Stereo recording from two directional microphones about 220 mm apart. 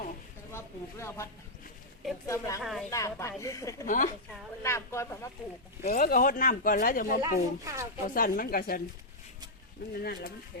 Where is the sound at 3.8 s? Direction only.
35° left (ahead or behind).